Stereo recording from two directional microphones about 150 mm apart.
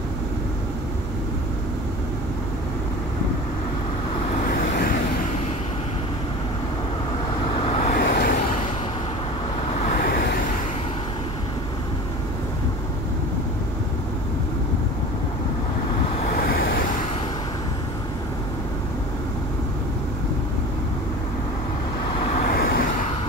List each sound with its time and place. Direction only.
4.5 s vehicle: 70° left (ahead or behind)
7.6 s vehicle: 40° left (ahead or behind)
7.9 s vehicle: 75° left (ahead or behind)
16.3 s vehicle: 80° left
22.3 s vehicle: 75° left (ahead or behind)